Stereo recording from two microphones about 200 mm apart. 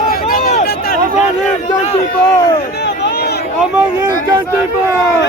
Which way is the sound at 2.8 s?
60° left (ahead or behind).